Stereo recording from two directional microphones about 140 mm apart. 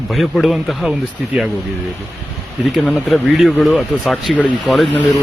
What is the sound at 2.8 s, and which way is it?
A man's voice, centre (ahead or behind).